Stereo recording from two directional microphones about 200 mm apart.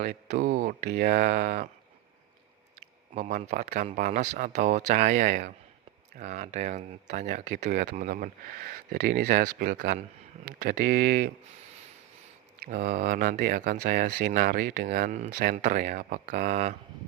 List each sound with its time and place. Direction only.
0.0 s speech: 45° right (ahead or behind)
3.2 s speech: 35° right (ahead or behind)
12.6 s speech: 45° right (ahead or behind)